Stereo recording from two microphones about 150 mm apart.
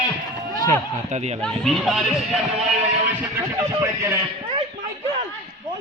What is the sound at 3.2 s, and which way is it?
Speech, 15° right (ahead or behind).